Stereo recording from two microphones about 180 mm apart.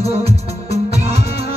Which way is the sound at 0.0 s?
35° right (ahead or behind).